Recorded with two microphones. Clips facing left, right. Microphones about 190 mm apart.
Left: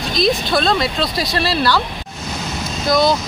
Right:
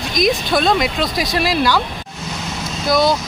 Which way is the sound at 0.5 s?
15° right (ahead or behind).